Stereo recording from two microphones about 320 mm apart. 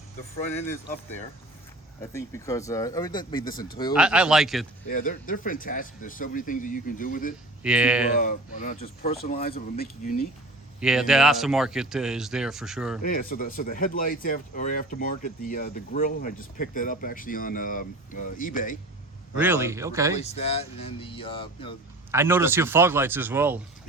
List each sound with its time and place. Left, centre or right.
2.0 s speech: centre
3.9 s speech: centre
4.9 s speech: left
7.6 s speech: centre
8.1 s speech: left
10.8 s speech: centre
13.0 s speech: left
19.4 s speech: centre
20.1 s speech: centre
22.1 s speech: centre